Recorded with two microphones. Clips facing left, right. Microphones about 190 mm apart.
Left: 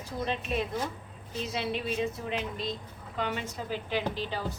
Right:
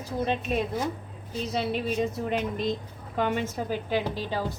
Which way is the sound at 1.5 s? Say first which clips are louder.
Right 4 dB; 40° right (ahead or behind).